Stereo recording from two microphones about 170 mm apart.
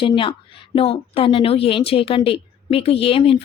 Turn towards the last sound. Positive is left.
turn(degrees=35)  # may be behind; listen again after turning